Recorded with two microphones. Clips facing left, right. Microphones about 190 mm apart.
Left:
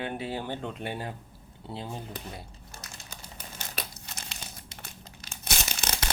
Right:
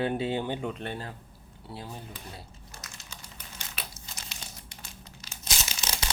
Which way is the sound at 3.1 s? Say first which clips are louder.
Left 1 dB; 45° left (ahead or behind).